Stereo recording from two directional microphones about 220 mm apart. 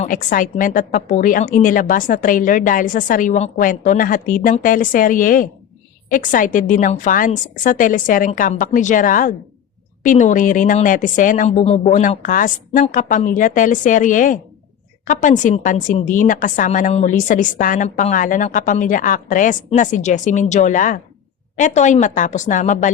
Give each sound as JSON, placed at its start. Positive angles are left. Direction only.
{"t": 0.0, "sound": "a woman's voice", "side_deg": 40}